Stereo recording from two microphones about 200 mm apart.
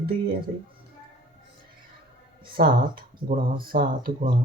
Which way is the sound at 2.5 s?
45° right (ahead or behind).